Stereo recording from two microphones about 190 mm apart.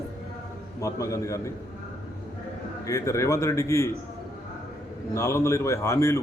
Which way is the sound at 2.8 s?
15° left (ahead or behind).